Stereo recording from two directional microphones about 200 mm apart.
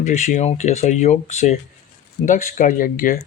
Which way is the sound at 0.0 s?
40° left (ahead or behind).